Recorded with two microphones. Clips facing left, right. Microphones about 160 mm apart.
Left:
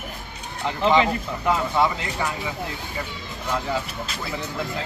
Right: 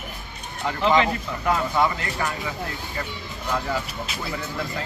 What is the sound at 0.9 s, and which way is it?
Speech, 20° left (ahead or behind).